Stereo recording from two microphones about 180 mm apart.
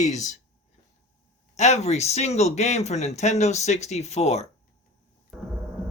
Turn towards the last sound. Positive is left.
turn(degrees=0)  # may be behind; listen again after turning